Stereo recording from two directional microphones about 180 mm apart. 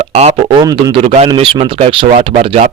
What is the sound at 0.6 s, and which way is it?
Speech, 20° right (ahead or behind).